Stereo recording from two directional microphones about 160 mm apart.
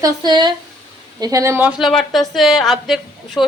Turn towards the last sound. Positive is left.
turn(degrees=0)  # may be behind; listen again after turning